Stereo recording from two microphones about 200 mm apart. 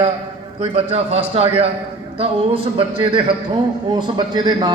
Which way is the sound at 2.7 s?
25° right (ahead or behind).